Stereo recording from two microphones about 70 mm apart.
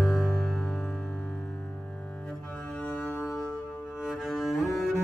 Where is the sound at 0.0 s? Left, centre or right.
Centre.